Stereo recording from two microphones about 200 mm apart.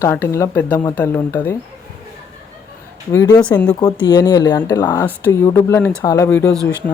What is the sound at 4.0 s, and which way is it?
Speech, 20° left (ahead or behind).